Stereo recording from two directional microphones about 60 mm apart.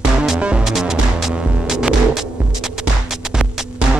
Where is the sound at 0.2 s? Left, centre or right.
Centre.